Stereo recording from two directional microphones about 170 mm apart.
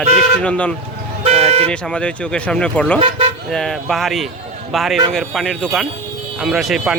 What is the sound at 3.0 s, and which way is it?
Speech, 30° right (ahead or behind).